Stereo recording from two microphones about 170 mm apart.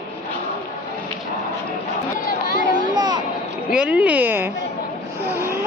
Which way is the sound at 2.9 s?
25° right (ahead or behind).